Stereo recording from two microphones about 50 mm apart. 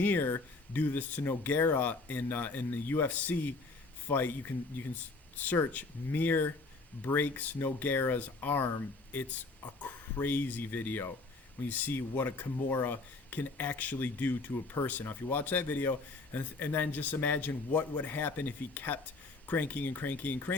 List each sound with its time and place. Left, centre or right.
0.0 s speech: left
3.1 s speech: left
6.1 s speech: left